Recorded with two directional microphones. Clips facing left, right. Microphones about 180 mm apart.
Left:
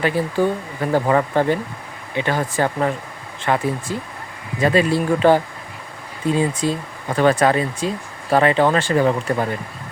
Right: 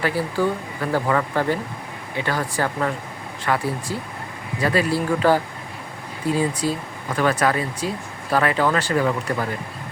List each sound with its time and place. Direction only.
0.0 s speech: 20° left (ahead or behind)